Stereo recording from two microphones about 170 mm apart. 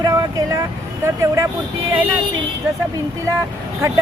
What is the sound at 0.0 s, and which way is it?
Vehicle, 20° right (ahead or behind).